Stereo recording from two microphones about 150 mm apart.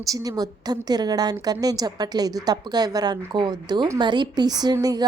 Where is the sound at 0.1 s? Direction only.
25° right (ahead or behind).